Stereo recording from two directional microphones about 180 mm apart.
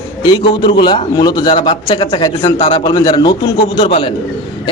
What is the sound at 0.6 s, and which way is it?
A man's voice, 25° left (ahead or behind).